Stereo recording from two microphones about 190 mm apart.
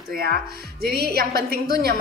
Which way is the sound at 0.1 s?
55° right (ahead or behind).